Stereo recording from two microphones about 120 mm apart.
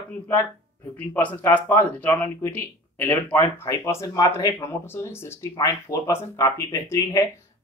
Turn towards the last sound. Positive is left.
turn(degrees=25)  # may be behind; listen again after turning